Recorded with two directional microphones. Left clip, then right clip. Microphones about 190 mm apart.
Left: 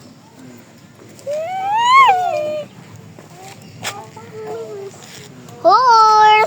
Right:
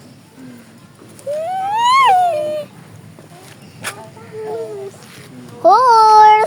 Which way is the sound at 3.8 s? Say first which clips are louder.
Left 1 dB; 5° left (ahead or behind).